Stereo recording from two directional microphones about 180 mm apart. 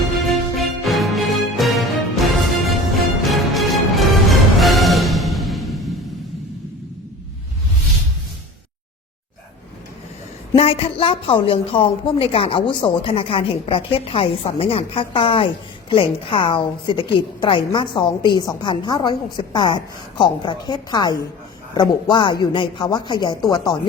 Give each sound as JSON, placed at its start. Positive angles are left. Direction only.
{"t": 0.1, "sound": "music", "side_deg": 0}
{"t": 10.5, "sound": "a woman's voice", "side_deg": 35}